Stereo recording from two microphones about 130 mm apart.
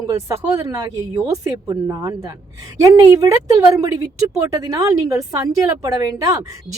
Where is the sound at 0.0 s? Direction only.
25° right (ahead or behind).